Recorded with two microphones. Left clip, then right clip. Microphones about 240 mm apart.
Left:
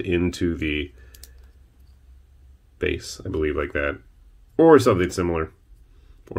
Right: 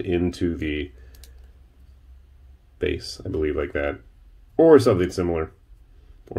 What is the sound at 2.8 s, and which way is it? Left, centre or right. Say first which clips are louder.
Speech: even; centre.